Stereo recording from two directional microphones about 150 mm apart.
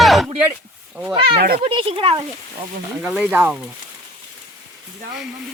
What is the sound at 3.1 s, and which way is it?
Speech, 10° right (ahead or behind).